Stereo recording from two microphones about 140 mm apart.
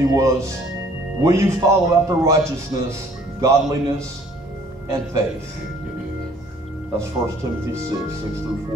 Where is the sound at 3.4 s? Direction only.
20° right (ahead or behind).